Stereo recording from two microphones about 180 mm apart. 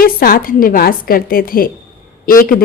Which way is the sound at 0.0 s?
55° left (ahead or behind).